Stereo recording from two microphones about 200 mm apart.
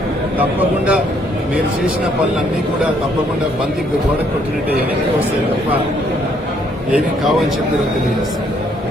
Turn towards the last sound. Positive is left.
turn(degrees=-5)  # may be behind; listen again after turning